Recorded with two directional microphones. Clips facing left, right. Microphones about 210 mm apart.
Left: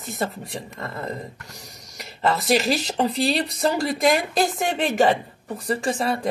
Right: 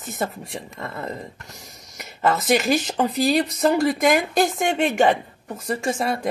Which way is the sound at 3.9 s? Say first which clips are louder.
Right 2 dB; centre (ahead or behind).